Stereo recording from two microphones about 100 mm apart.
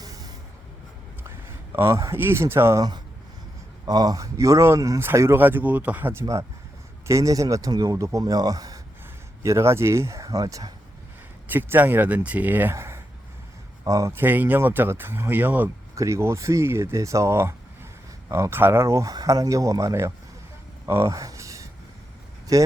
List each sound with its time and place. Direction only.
0.0 s vehicle: 40° right (ahead or behind)
1.7 s speech: 25° right (ahead or behind)
3.8 s speech: 40° right (ahead or behind)
11.4 s speech: 20° right (ahead or behind)
12.7 s a sound: 25° right (ahead or behind)
13.8 s speech: 35° right (ahead or behind)
14.1 s speech: 20° right (ahead or behind)
16.0 s speech: 30° right (ahead or behind)
20.8 s a sound: 25° right (ahead or behind)
22.5 s speech: 35° right (ahead or behind)